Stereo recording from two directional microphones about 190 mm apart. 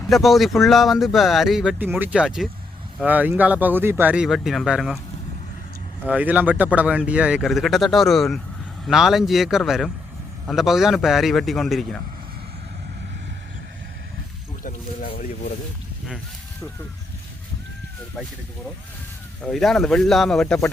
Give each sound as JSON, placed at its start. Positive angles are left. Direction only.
{"t": 0.1, "sound": "speech", "side_deg": 0}
{"t": 6.1, "sound": "speech", "side_deg": -10}
{"t": 14.6, "sound": "a sound", "side_deg": 45}
{"t": 19.4, "sound": "speech", "side_deg": 0}